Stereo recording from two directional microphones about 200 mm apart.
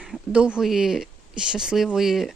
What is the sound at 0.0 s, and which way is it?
Speech, 5° right (ahead or behind).